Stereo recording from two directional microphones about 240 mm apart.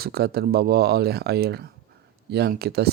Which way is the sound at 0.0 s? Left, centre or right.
Right.